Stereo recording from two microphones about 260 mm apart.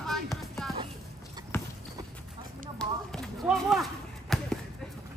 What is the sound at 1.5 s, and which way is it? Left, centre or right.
Clip-clop, centre.